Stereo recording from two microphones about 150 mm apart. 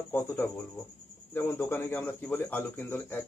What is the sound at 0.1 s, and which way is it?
Speech, 10° left (ahead or behind).